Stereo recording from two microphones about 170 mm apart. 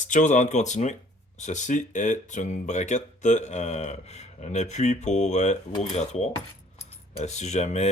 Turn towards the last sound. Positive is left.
turn(degrees=40)  # may be behind; listen again after turning